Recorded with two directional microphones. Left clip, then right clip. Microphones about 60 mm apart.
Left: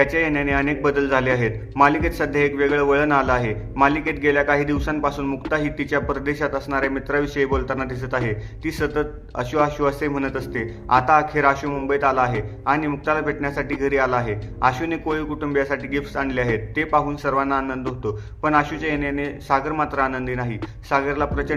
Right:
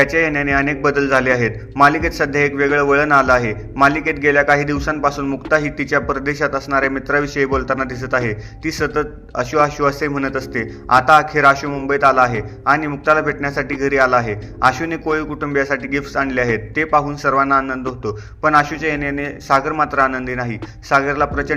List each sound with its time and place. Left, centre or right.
0.0 s a man's voice: right